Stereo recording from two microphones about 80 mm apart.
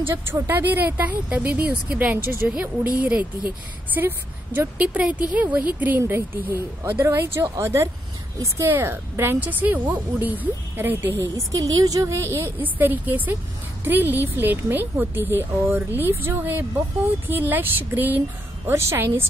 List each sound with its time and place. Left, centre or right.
0.0 s speech: right
11.1 s a woman's voice: right
18.7 s a woman's voice: right